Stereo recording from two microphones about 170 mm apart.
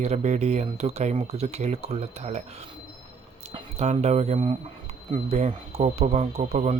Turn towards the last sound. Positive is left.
turn(degrees=-40)  # may be behind; listen again after turning